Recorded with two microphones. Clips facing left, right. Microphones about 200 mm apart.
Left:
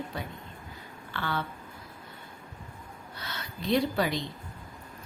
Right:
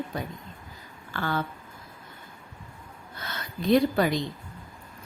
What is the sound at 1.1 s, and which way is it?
Speech, 45° right (ahead or behind).